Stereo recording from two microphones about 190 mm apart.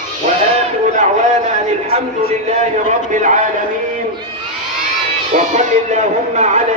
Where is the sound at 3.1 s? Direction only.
40° right (ahead or behind).